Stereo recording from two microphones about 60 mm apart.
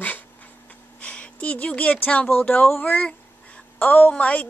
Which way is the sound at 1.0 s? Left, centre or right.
Left.